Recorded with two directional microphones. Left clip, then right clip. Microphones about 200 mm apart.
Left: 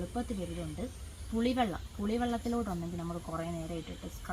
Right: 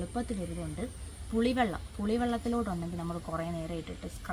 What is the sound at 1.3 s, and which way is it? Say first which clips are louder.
A woman's voice: right 2 dB; 20° right (ahead or behind).